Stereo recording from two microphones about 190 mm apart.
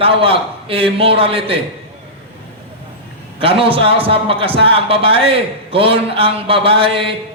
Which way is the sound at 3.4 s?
30° right (ahead or behind).